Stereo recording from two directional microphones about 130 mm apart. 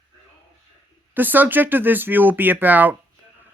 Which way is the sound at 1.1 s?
15° right (ahead or behind).